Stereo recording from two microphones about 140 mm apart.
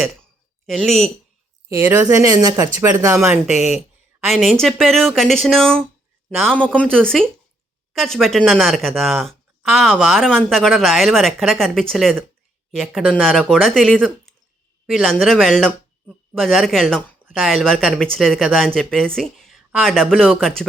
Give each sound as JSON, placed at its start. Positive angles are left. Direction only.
{"t": 0.7, "sound": "speech", "side_deg": 0}
{"t": 1.7, "sound": "speech", "side_deg": -20}
{"t": 2.7, "sound": "a woman's voice", "side_deg": -15}